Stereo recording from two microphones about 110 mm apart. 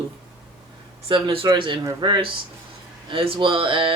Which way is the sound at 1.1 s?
55° right (ahead or behind).